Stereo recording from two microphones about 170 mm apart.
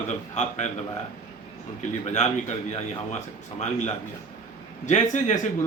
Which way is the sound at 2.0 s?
45° left (ahead or behind).